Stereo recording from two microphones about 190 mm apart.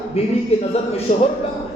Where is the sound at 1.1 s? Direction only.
40° left (ahead or behind).